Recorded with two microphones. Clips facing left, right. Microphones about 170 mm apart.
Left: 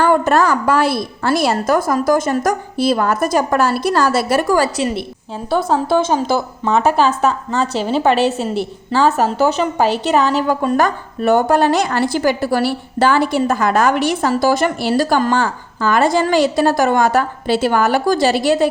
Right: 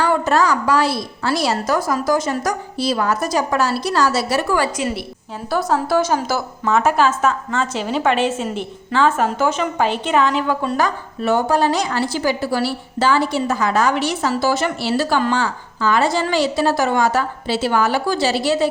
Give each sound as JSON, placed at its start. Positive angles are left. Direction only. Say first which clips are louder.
{"t": 0.0, "sound": "a woman's voice", "louder": "left 3 dB", "side_deg": 55}
{"t": 5.5, "sound": "a woman's voice", "louder": "left 3 dB", "side_deg": 25}